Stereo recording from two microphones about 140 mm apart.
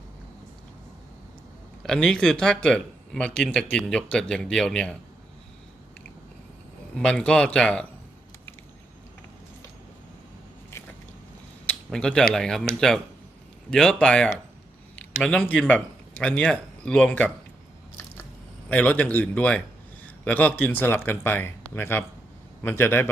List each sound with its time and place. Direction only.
1.8 s speech: 5° left (ahead or behind)
6.9 s speech: 5° left (ahead or behind)
11.6 s a sound: 10° left (ahead or behind)
12.3 s speech: 5° left (ahead or behind)
18.7 s speech: 10° left (ahead or behind)